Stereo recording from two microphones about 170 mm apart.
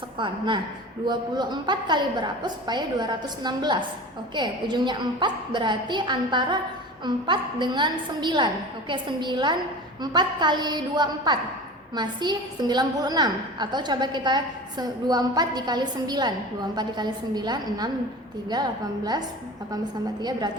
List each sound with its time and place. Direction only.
0.2 s a woman's voice: 30° right (ahead or behind)